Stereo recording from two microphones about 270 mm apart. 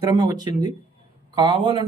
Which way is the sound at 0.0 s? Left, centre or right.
Centre.